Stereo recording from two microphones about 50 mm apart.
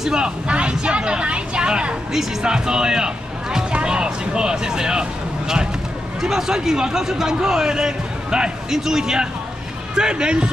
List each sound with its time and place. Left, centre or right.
0.0 s a man's voice: centre
6.2 s a man's voice: centre